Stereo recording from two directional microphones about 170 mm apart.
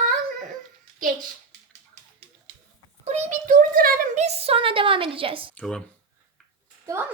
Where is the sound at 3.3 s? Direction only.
50° right (ahead or behind).